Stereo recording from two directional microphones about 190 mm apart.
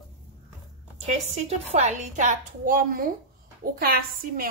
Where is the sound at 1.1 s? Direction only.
35° right (ahead or behind).